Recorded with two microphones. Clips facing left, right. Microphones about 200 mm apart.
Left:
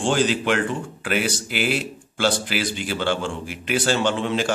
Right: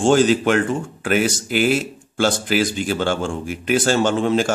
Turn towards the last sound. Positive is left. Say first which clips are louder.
# right 4 dB
turn(degrees=-45)  # may be behind; listen again after turning